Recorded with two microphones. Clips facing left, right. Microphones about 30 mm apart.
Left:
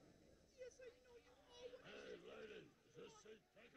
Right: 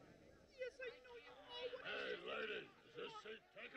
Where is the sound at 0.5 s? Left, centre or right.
Right.